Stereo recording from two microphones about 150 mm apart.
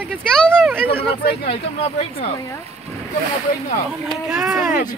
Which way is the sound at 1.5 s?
40° left (ahead or behind).